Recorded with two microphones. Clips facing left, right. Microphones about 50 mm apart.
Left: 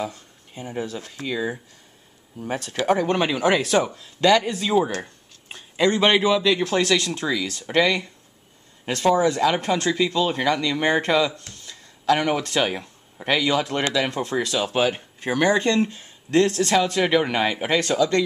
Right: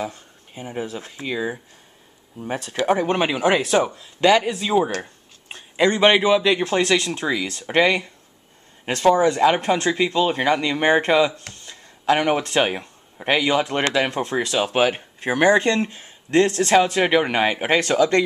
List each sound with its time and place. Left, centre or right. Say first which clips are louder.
0.1 s speech: right 1 dB; centre
13.9 s speech: right 2 dB; right
15.4 s speech: right 3 dB; centre; by 18.2 s right